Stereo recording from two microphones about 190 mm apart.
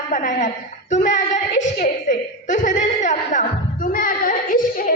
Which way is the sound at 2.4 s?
40° left (ahead or behind).